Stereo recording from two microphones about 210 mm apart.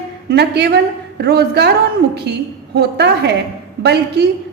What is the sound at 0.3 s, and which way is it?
A woman's voice, 50° right (ahead or behind).